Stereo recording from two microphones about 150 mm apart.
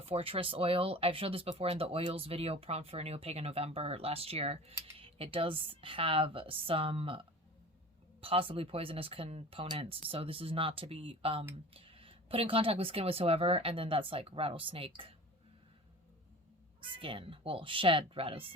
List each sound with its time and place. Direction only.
0.0 s speech: 40° right (ahead or behind)
16.9 s speech: 35° right (ahead or behind)